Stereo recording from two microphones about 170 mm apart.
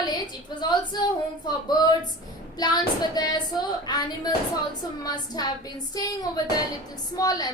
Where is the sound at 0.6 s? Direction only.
25° left (ahead or behind).